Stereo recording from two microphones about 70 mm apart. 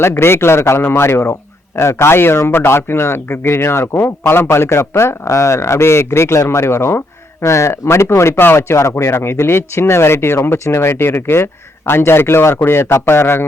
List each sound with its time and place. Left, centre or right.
0.0 s speech: left